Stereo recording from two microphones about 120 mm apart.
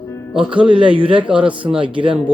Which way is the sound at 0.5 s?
45° right (ahead or behind).